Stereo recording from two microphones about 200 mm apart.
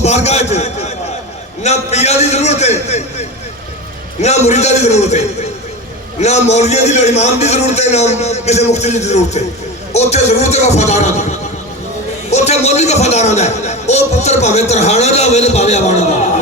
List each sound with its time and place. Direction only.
0.0 s a man's voice: 35° left (ahead or behind)